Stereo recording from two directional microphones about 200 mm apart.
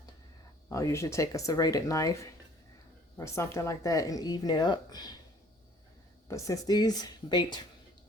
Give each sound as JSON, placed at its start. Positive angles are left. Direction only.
{"t": 0.7, "sound": "a woman's voice", "side_deg": 15}
{"t": 6.2, "sound": "speech", "side_deg": 15}